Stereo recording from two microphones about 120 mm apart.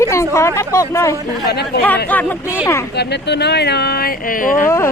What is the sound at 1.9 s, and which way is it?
Speech, 15° left (ahead or behind).